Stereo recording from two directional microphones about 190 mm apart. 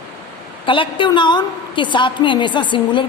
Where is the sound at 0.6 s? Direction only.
25° left (ahead or behind).